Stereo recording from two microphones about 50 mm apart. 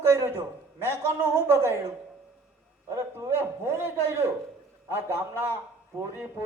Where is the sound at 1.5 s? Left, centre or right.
Right.